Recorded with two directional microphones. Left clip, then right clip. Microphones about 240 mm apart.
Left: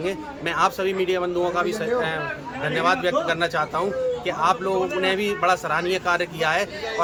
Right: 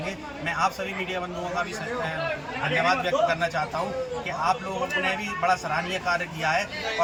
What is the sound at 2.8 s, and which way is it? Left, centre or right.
Speech, left.